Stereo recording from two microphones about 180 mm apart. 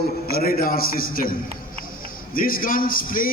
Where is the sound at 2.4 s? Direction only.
50° left (ahead or behind).